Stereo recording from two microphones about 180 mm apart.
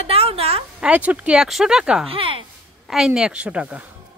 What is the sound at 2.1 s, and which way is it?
Speech, 30° right (ahead or behind).